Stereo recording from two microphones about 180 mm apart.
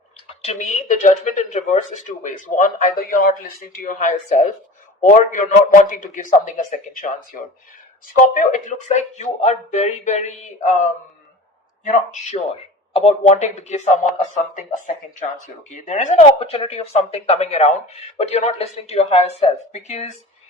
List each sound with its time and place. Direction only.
0.3 s speech: 40° left (ahead or behind)
11.9 s speech: 40° left (ahead or behind)